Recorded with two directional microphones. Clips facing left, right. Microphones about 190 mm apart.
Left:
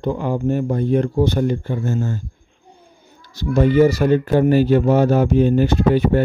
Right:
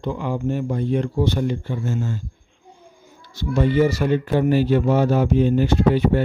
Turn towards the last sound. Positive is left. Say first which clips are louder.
# left 2 dB
turn(degrees=50)  # may be behind; listen again after turning